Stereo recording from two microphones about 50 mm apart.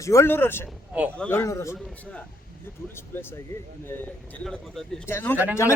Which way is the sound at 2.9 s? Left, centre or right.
Left.